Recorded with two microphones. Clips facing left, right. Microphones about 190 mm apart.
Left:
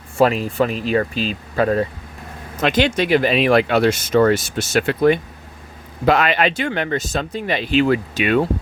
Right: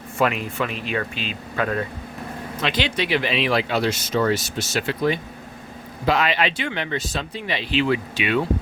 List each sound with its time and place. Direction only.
0.2 s speech: 35° left (ahead or behind)
2.6 s speech: 50° left (ahead or behind)